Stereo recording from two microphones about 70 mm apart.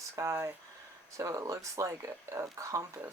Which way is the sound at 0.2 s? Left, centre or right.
Right.